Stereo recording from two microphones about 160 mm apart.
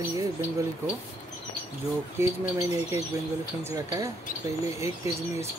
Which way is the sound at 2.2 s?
15° right (ahead or behind).